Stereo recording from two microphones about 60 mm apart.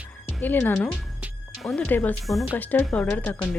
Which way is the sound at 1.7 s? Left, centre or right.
Left.